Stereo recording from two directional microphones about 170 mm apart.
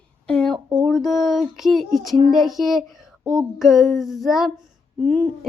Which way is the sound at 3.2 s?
25° right (ahead or behind).